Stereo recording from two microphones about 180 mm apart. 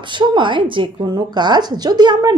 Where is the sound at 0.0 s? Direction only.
25° right (ahead or behind).